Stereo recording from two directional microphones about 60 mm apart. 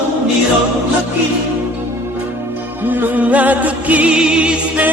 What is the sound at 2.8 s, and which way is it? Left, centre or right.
Music, right.